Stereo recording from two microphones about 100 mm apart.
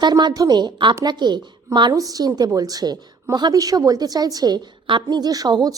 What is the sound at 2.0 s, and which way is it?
A woman's voice, 35° right (ahead or behind).